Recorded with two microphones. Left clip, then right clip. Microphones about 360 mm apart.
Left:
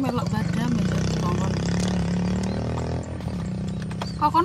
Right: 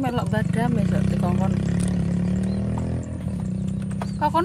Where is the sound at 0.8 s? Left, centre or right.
Left.